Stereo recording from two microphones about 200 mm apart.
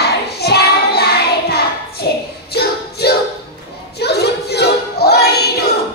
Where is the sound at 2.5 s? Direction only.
55° left (ahead or behind).